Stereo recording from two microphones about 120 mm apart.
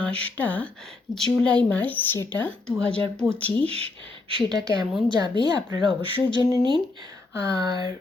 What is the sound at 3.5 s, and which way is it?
A woman's voice, 55° right (ahead or behind).